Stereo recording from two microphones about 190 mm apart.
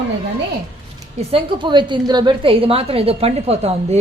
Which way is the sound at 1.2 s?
25° right (ahead or behind).